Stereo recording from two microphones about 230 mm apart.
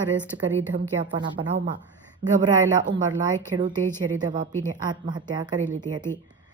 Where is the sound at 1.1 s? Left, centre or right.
Right.